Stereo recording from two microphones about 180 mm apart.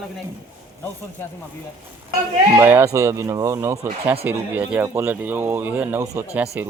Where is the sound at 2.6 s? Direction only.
15° right (ahead or behind).